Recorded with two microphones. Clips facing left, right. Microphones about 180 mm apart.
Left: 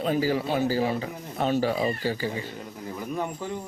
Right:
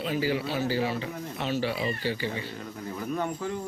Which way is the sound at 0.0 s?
45° left (ahead or behind).